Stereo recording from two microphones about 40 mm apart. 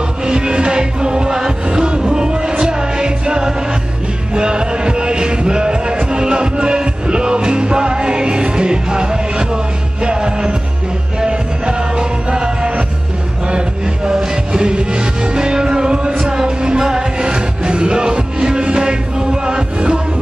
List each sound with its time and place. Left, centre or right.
0.3 s music: right